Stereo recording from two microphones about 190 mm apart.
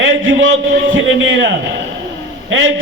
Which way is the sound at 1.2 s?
80° right.